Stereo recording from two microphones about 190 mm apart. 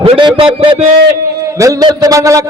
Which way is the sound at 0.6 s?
30° right (ahead or behind).